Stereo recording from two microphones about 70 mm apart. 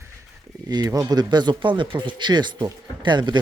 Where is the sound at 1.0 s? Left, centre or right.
Right.